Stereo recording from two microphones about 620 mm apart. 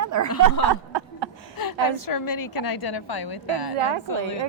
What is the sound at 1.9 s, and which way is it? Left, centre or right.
A woman's voice, left.